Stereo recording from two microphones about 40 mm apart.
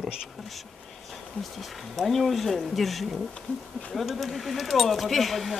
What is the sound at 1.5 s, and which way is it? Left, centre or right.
Speech, centre.